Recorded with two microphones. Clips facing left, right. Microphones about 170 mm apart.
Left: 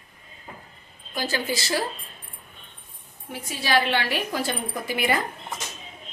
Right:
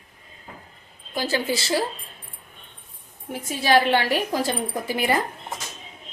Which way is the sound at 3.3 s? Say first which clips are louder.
Right 5 dB; 45° right (ahead or behind).